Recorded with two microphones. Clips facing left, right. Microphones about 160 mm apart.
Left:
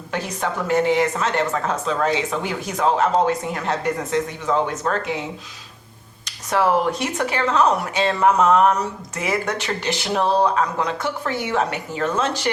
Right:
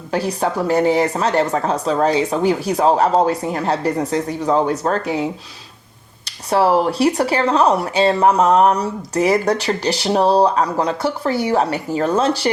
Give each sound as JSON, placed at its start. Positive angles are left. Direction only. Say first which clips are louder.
{"t": 0.1, "sound": "speech", "louder": "right 6 dB", "side_deg": -35}
{"t": 6.5, "sound": "speech", "louder": "right 4 dB", "side_deg": -35}